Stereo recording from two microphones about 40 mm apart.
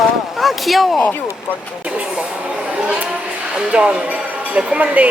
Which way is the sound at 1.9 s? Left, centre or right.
Right.